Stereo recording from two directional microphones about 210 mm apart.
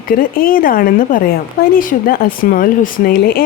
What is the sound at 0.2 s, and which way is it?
Speech, 40° left (ahead or behind).